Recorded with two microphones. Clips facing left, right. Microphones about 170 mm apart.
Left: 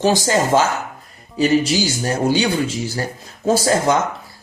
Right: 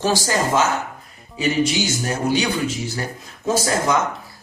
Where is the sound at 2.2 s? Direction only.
30° left (ahead or behind).